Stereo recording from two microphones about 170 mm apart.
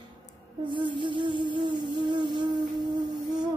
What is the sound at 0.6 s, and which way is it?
Music, 30° right (ahead or behind).